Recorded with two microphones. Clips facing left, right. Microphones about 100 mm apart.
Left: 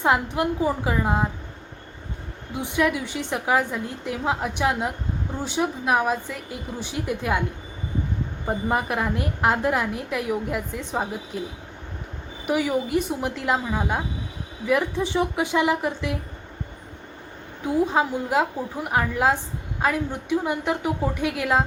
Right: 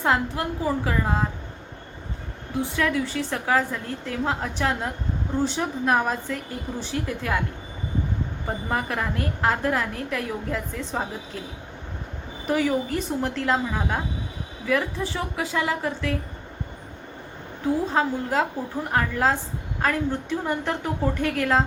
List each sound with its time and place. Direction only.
0.0 s a woman's voice: 20° left (ahead or behind)
2.6 s a woman's voice: 15° left (ahead or behind)
7.0 s a woman's voice: 20° left (ahead or behind)
8.4 s a woman's voice: 15° left (ahead or behind)
14.7 s a woman's voice: 20° left (ahead or behind)
17.9 s a woman's voice: 10° left (ahead or behind)